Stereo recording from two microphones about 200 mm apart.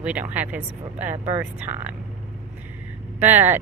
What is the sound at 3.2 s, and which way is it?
Speech, 10° right (ahead or behind).